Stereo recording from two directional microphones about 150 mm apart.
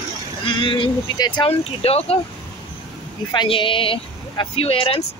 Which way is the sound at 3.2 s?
35° left (ahead or behind).